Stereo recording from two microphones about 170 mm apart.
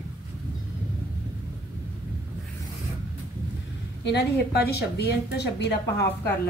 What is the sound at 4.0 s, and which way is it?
A woman's voice, 80° left.